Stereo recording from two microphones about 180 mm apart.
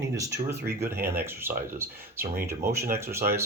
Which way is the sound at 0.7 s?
15° right (ahead or behind).